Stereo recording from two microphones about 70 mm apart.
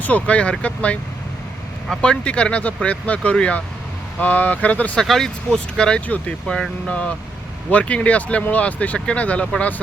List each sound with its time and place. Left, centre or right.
0.0 s speech: centre
2.0 s speech: centre
4.9 s speech: centre; by 9.8 s left